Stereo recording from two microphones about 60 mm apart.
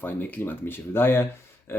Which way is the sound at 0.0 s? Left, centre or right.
Left.